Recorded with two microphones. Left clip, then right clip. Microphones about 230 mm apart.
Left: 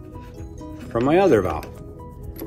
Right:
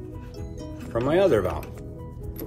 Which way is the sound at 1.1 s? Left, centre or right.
Left.